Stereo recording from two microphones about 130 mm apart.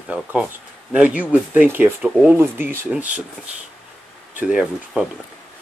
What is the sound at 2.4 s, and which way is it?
Speech, 15° right (ahead or behind).